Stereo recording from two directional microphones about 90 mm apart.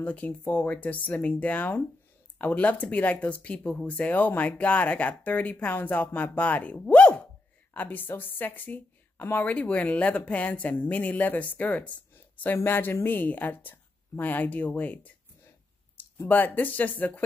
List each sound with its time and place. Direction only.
0.0 s a woman's voice: 15° left (ahead or behind)
16.3 s a woman's voice: 20° left (ahead or behind)